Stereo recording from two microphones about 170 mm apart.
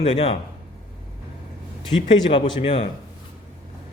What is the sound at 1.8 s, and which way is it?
Speech, 30° left (ahead or behind).